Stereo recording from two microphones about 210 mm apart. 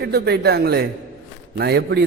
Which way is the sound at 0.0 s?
50° right (ahead or behind).